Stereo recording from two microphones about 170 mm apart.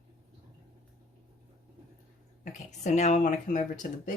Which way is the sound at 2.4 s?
45° left (ahead or behind).